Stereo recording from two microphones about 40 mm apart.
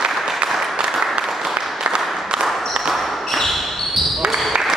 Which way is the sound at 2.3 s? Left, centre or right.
Right.